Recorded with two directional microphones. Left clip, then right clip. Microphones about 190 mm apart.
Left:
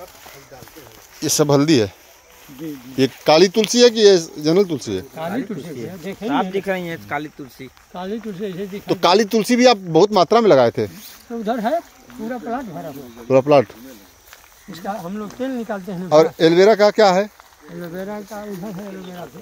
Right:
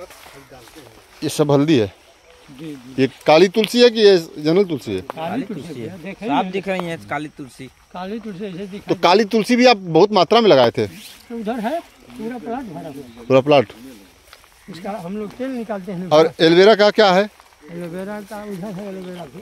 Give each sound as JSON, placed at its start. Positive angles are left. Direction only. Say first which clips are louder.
{"t": 1.2, "sound": "speech", "louder": "left 1 dB", "side_deg": -5}
{"t": 3.0, "sound": "speech", "louder": "right 1 dB", "side_deg": -5}
{"t": 6.3, "sound": "speech", "louder": "right 1 dB", "side_deg": -70}
{"t": 7.9, "sound": "speech", "louder": "left 1 dB", "side_deg": 30}
{"t": 8.8, "sound": "speech", "louder": "right 1 dB", "side_deg": -10}
{"t": 11.4, "sound": "speech", "louder": "left 3 dB", "side_deg": 20}
{"t": 12.3, "sound": "speech", "louder": "left 2 dB", "side_deg": 35}
{"t": 13.3, "sound": "speech", "louder": "even", "side_deg": -15}
{"t": 14.7, "sound": "speech", "louder": "left 1 dB", "side_deg": -30}
{"t": 16.1, "sound": "speech", "louder": "even", "side_deg": -20}
{"t": 17.9, "sound": "speech", "louder": "left 1 dB", "side_deg": -55}